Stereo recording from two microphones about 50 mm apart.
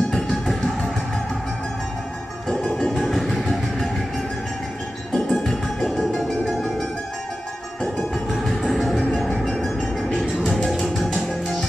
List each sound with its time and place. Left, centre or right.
0.1 s music: centre
2.4 s music: centre
2.9 s train: centre
5.1 s music: centre
8.1 s music: centre